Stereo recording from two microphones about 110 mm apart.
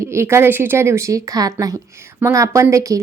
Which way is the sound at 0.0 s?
25° right (ahead or behind).